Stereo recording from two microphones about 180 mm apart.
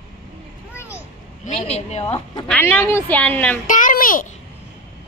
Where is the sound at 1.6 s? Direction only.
35° left (ahead or behind).